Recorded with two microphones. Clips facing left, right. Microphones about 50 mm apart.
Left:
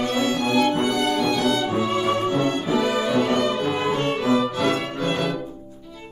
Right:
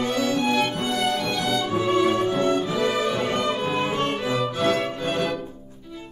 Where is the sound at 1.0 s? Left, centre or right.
Left.